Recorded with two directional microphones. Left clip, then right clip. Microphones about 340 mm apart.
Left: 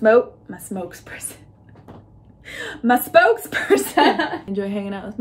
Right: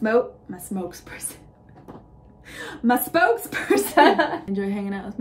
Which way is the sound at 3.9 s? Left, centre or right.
Centre.